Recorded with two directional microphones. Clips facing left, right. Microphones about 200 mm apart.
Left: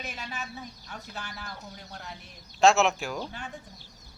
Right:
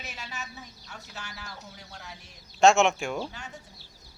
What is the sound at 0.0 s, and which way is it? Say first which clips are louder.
Speech: left 3 dB; 55° left (ahead or behind).